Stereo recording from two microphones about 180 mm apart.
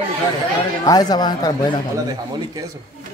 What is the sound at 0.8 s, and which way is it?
Speech, 20° left (ahead or behind).